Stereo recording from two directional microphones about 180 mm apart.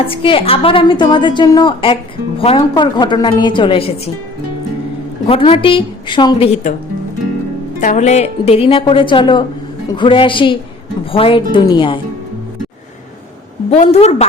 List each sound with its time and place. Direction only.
0.0 s a woman's voice: 30° left (ahead or behind)
5.3 s a woman's voice: 30° left (ahead or behind)
7.8 s a woman's voice: 45° left (ahead or behind); by 11.9 s 30° left (ahead or behind)
13.7 s a woman's voice: 40° left (ahead or behind)